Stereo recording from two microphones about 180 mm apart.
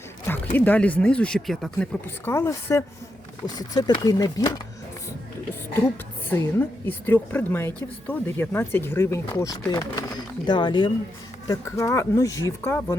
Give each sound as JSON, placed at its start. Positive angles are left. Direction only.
{"t": 0.3, "sound": "speech", "side_deg": 10}
{"t": 6.2, "sound": "speech", "side_deg": 10}